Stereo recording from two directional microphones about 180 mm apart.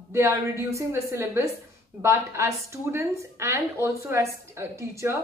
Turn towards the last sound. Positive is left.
turn(degrees=-15)  # may be behind; listen again after turning